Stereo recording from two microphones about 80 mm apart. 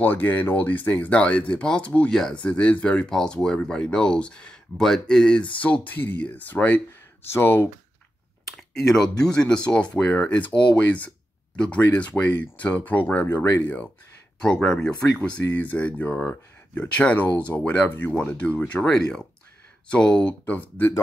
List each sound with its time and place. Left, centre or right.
0.0 s speech: left
8.5 s speech: centre